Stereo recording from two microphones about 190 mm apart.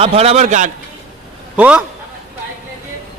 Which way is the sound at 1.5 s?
5° right (ahead or behind).